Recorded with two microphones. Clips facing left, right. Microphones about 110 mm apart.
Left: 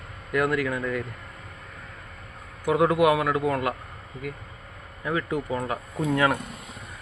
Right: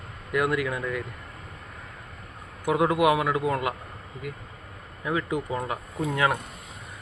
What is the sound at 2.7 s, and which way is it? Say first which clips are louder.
Speech: left 1 dB; 20° right (ahead or behind).